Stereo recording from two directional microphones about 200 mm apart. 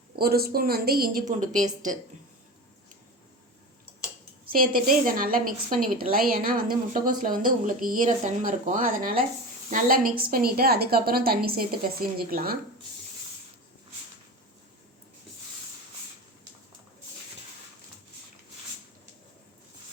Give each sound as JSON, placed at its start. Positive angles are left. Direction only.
{"t": 0.2, "sound": "a woman's voice", "side_deg": -50}
{"t": 4.4, "sound": "a woman's voice", "side_deg": -45}